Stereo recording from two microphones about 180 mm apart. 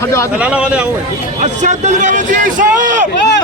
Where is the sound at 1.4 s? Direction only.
40° right (ahead or behind).